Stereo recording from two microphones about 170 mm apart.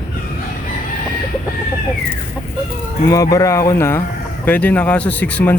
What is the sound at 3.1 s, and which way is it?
Speech, 20° left (ahead or behind).